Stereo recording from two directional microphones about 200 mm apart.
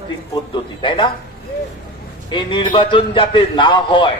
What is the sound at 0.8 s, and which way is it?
Speech, 25° left (ahead or behind).